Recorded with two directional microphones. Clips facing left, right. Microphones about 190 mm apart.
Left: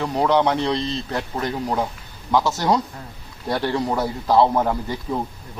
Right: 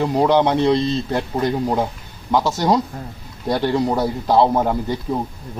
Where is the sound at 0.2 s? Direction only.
25° right (ahead or behind).